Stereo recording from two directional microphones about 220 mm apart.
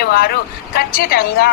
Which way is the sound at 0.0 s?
45° left (ahead or behind).